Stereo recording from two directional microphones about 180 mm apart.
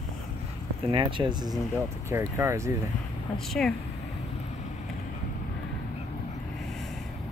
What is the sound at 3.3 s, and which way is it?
Speech, centre (ahead or behind).